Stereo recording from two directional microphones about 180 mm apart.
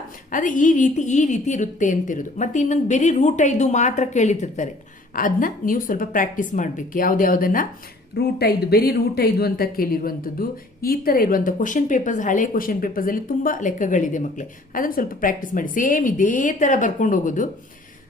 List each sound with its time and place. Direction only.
0.3 s a woman's voice: 45° left (ahead or behind)
8.1 s speech: 65° left (ahead or behind); by 17.5 s 45° left (ahead or behind)